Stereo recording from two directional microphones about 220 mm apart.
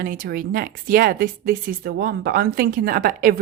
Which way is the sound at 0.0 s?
40° right (ahead or behind).